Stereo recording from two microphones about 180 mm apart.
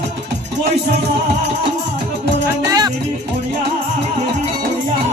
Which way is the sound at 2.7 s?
20° right (ahead or behind).